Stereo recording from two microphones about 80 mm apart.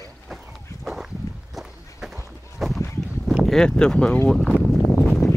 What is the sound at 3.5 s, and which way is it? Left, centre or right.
Speech, centre.